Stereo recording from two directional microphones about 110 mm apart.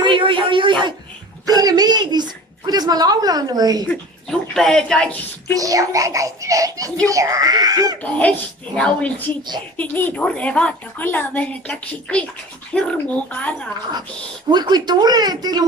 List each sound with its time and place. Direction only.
0.0 s speech: 50° right (ahead or behind)
1.5 s a child's voice: 35° right (ahead or behind)
3.8 s speech: 5° left (ahead or behind)
5.5 s a child's voice: 30° right (ahead or behind)
8.7 s speech: 10° left (ahead or behind)
14.5 s a child's voice: 40° right (ahead or behind)